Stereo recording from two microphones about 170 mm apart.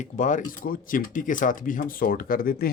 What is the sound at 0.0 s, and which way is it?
Speech, 50° left (ahead or behind).